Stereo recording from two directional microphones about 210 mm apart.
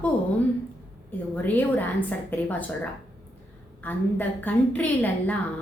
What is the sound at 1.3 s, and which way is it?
A woman's voice, 10° left (ahead or behind).